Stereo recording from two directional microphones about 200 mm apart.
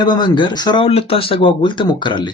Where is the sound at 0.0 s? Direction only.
25° left (ahead or behind).